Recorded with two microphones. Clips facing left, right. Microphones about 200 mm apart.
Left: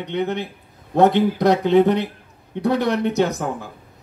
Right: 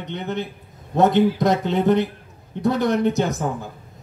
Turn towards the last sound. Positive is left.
turn(degrees=65)  # may be behind; listen again after turning